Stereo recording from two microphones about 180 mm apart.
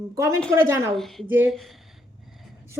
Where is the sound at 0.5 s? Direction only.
15° right (ahead or behind).